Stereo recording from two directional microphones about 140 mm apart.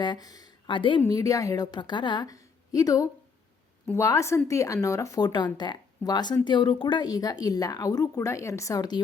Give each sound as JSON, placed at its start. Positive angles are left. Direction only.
{"t": 0.0, "sound": "speech", "side_deg": 30}
{"t": 1.0, "sound": "speech", "side_deg": 25}